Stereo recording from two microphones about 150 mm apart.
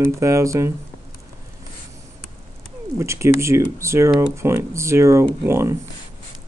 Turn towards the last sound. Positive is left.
turn(degrees=-15)  # may be behind; listen again after turning